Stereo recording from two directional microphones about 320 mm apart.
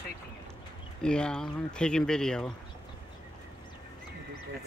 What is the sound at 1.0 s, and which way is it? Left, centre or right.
Speech, centre.